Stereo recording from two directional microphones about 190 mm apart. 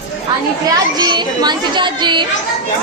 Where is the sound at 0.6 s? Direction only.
20° right (ahead or behind).